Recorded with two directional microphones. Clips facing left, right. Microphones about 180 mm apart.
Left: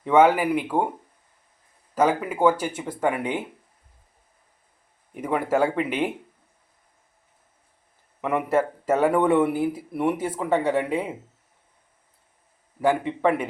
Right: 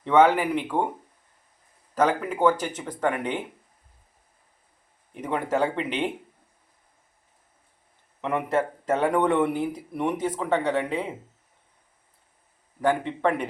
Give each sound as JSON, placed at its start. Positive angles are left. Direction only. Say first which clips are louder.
{"t": 0.0, "sound": "speech", "louder": "left 1 dB", "side_deg": 10}
{"t": 2.0, "sound": "speech", "louder": "left 1 dB", "side_deg": 10}
{"t": 5.1, "sound": "speech", "louder": "left 3 dB", "side_deg": 10}
{"t": 8.2, "sound": "speech", "louder": "left 2 dB", "side_deg": 10}
{"t": 12.8, "sound": "speech", "louder": "left 2 dB", "side_deg": 5}